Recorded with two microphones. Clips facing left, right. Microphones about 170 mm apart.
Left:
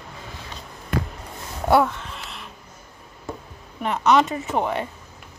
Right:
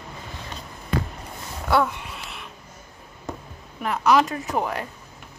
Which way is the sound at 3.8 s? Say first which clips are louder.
Left 1 dB; centre (ahead or behind).